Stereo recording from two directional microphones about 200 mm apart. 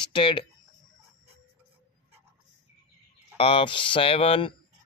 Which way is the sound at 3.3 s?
25° left (ahead or behind).